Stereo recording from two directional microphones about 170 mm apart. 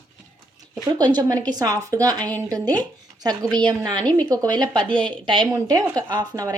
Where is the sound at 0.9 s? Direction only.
25° right (ahead or behind).